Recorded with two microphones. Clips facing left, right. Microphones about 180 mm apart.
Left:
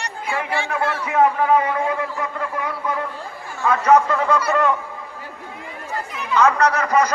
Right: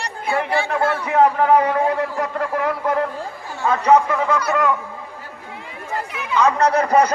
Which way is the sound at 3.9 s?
10° right (ahead or behind).